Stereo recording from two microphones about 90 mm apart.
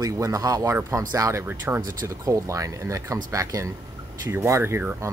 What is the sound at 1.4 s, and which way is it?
Speech, 25° right (ahead or behind).